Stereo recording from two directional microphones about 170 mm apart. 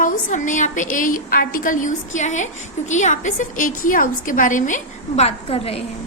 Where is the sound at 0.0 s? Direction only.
50° left (ahead or behind).